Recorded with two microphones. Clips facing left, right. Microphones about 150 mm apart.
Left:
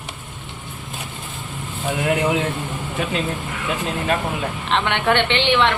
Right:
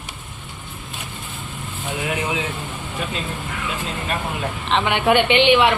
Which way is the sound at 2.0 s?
65° left (ahead or behind).